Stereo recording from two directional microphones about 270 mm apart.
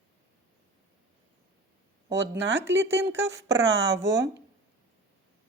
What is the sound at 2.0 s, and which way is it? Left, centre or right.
Speech, right.